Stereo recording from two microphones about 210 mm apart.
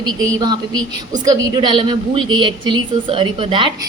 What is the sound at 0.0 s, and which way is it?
A woman's voice, 15° right (ahead or behind).